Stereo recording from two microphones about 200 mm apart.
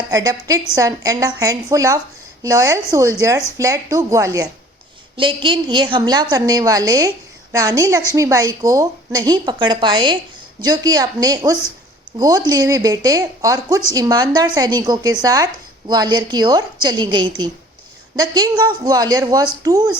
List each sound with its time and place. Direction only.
0.1 s a woman's voice: 15° right (ahead or behind)